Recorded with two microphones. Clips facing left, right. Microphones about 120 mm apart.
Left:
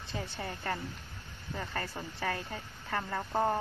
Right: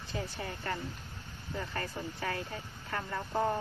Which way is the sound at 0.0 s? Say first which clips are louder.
Even; 30° left (ahead or behind).